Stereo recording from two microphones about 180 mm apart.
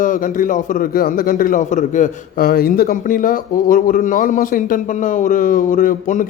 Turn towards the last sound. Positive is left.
turn(degrees=45)  # may be behind; listen again after turning